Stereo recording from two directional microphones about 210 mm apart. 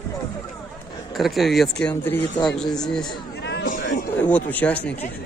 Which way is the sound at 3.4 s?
50° left (ahead or behind).